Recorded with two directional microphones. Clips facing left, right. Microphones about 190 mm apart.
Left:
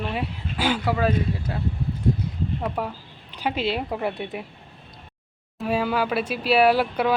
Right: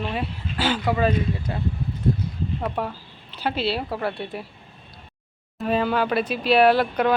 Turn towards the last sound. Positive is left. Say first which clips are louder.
# right 1 dB
turn(degrees=10)  # may be behind; listen again after turning